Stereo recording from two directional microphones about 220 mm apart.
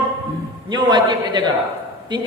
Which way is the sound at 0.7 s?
20° right (ahead or behind).